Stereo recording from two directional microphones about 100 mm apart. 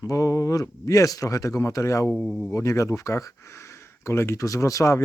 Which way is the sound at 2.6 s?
30° left (ahead or behind).